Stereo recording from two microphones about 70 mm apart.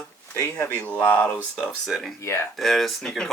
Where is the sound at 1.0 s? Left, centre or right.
Left.